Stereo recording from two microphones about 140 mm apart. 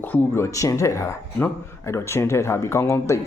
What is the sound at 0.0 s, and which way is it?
Speech, 15° left (ahead or behind).